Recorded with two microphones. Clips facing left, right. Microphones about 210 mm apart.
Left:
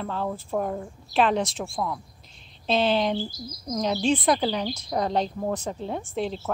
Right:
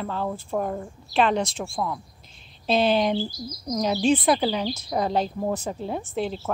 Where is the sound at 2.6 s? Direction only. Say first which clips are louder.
Right 2 dB; 10° right (ahead or behind).